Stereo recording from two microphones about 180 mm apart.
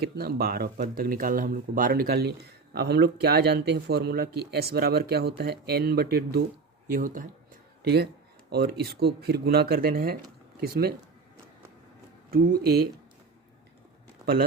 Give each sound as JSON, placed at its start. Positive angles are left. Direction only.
{"t": 0.0, "sound": "speech", "side_deg": -60}
{"t": 6.9, "sound": "speech", "side_deg": -50}
{"t": 8.4, "sound": "speech", "side_deg": -60}
{"t": 12.3, "sound": "speech", "side_deg": -55}